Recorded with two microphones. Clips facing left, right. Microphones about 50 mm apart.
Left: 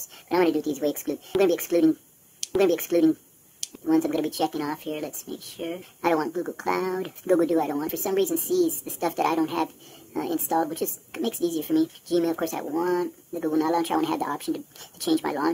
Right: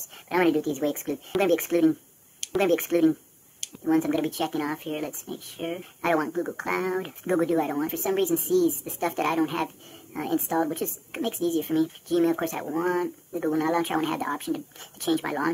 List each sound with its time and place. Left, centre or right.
0.1 s speech: centre